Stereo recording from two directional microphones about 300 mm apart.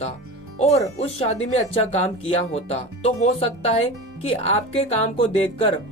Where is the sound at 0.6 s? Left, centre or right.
Left.